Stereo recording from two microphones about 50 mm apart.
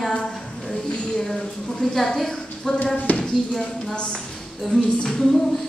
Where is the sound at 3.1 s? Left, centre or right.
Left.